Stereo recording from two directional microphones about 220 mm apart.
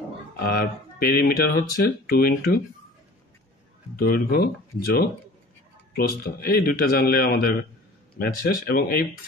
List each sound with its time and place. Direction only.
0.4 s speech: 40° left (ahead or behind)
4.0 s speech: 45° left (ahead or behind)